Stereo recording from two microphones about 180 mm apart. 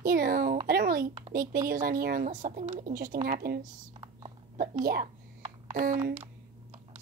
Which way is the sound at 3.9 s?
30° right (ahead or behind).